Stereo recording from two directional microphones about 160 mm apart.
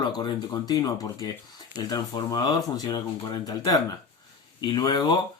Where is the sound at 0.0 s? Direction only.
25° left (ahead or behind).